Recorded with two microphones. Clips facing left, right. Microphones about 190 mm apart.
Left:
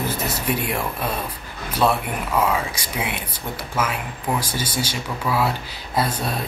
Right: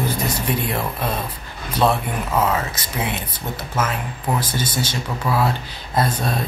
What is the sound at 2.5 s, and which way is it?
Speech, 10° left (ahead or behind).